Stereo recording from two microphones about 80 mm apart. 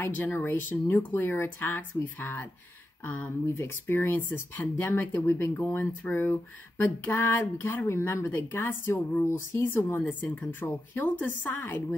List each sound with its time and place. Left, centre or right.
0.0 s speech: left
3.4 s speech: left